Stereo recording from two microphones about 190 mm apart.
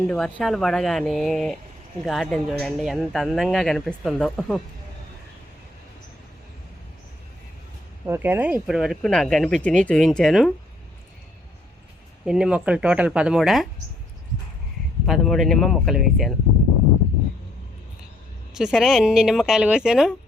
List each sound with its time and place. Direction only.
0.1 s speech: centre (ahead or behind)
8.0 s speech: 10° right (ahead or behind)
12.2 s speech: 5° right (ahead or behind)
15.0 s speech: centre (ahead or behind)
18.5 s speech: 5° right (ahead or behind)